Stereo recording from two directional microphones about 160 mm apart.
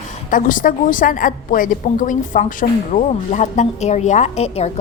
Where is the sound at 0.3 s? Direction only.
55° left (ahead or behind).